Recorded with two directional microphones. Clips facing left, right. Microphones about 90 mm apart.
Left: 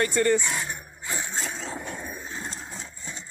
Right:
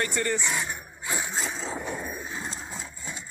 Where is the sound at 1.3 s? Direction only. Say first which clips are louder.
Right 1 dB; centre (ahead or behind).